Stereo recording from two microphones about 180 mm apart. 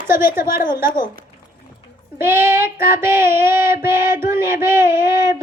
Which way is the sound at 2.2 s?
15° right (ahead or behind).